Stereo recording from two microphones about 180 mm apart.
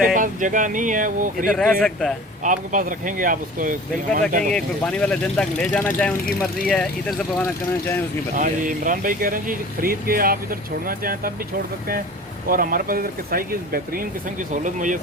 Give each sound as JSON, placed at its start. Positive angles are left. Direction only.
{"t": 0.1, "sound": "speech", "side_deg": -45}
{"t": 1.8, "sound": "speech", "side_deg": 0}
{"t": 2.4, "sound": "speech", "side_deg": -45}
{"t": 4.5, "sound": "speech", "side_deg": 5}
{"t": 8.4, "sound": "speech", "side_deg": -45}
{"t": 12.5, "sound": "speech", "side_deg": -50}